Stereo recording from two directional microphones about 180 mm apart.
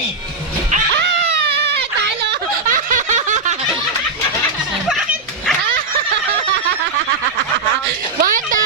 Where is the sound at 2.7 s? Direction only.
45° right (ahead or behind).